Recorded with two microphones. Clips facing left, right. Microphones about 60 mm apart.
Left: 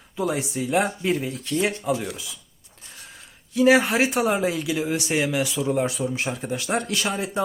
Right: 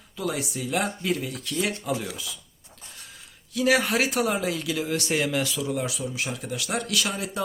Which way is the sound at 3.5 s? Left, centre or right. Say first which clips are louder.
Left 5 dB; left.